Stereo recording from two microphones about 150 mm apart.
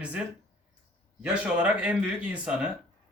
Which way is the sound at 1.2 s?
5° right (ahead or behind).